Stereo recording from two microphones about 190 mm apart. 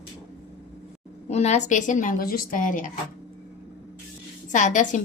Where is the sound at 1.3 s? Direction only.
35° left (ahead or behind).